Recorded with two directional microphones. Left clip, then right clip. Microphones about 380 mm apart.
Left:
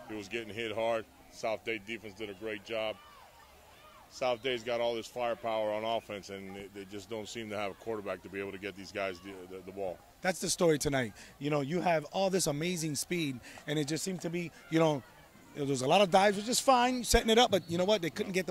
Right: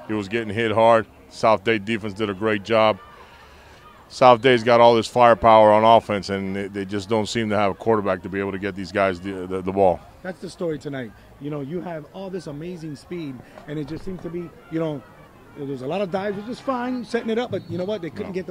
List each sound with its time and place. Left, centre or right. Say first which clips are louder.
0.1 s speech: right 14 dB; right
4.2 s speech: right 19 dB; right
10.2 s speech: left 3 dB; left